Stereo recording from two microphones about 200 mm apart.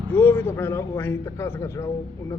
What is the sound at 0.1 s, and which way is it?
A man's voice, 10° left (ahead or behind).